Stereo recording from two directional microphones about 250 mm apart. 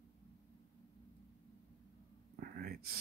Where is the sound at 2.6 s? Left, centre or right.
Right.